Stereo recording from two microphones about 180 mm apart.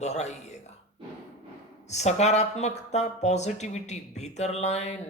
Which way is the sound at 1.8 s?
40° left (ahead or behind).